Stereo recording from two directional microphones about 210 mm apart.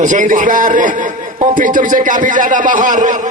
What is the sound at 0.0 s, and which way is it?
A man's voice, 40° right (ahead or behind).